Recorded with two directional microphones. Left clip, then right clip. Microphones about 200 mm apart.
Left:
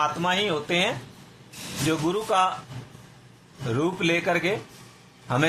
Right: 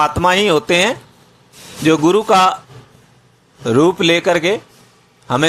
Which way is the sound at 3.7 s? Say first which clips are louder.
Right 12 dB; 30° right (ahead or behind).